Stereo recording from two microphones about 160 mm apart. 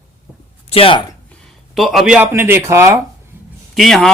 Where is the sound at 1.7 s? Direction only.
Centre (ahead or behind).